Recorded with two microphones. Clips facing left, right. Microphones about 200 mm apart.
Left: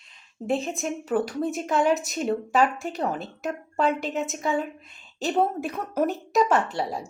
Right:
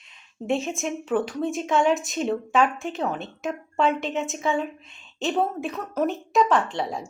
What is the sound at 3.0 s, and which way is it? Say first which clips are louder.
A woman's voice: even; 5° left (ahead or behind).